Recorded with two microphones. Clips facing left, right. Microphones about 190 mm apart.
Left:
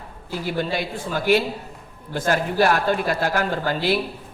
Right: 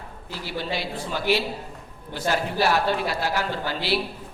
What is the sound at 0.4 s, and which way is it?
A man's voice, 50° left (ahead or behind).